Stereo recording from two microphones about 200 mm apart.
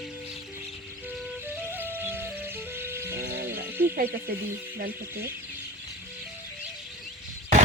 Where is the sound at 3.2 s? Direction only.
55° right (ahead or behind).